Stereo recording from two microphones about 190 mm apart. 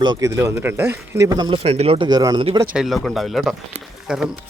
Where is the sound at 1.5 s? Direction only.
30° right (ahead or behind).